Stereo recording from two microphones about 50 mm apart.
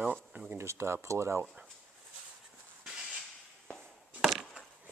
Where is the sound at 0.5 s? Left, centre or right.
Right.